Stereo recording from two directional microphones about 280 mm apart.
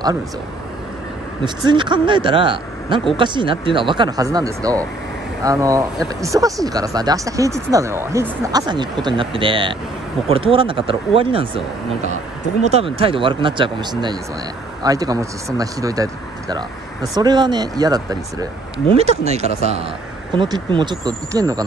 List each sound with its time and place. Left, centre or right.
1.4 s speech: centre
12.6 s speech: right